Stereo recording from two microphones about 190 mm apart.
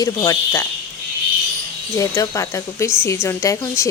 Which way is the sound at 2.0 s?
15° left (ahead or behind).